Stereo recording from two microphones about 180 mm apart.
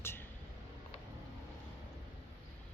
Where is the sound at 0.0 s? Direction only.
15° left (ahead or behind).